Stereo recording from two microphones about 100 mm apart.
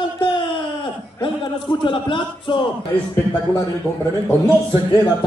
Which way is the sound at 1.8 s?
55° left (ahead or behind).